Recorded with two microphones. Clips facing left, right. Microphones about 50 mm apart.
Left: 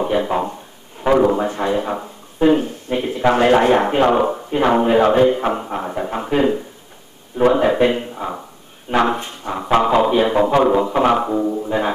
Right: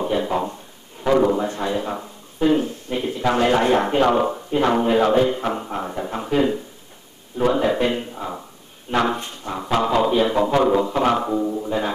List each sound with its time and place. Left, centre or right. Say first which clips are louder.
0.0 s speech: left 3 dB; left